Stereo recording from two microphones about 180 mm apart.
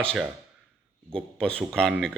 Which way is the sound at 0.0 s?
5° left (ahead or behind).